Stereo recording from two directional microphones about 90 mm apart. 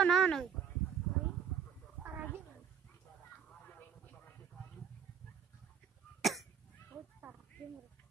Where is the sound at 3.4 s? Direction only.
15° left (ahead or behind).